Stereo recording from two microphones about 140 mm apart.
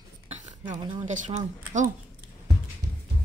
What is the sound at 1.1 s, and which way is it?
Speech, 60° right (ahead or behind).